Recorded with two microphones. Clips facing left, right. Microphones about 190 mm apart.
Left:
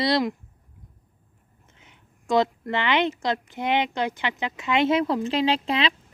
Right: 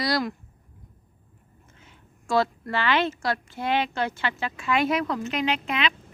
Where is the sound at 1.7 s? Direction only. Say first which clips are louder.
Right 2 dB; 20° left (ahead or behind).